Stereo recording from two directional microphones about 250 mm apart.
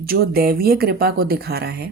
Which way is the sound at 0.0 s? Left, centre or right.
Right.